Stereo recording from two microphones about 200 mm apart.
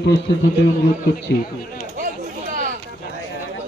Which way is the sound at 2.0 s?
45° right (ahead or behind).